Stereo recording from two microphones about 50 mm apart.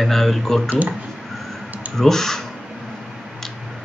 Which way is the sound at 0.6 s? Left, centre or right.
Right.